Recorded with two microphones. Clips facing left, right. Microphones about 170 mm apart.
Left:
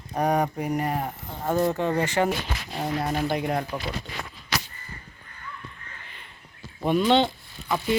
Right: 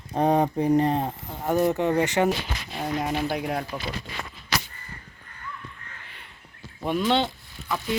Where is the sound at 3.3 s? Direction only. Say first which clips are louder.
Left 2 dB; 5° right (ahead or behind).